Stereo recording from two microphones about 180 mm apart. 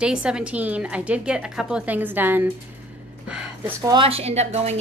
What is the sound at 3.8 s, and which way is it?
Speech, 25° right (ahead or behind).